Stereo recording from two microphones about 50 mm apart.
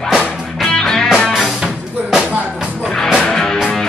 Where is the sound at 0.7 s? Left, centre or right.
Centre.